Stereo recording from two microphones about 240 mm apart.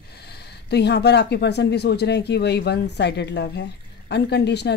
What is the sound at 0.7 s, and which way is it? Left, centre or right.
Speech, left.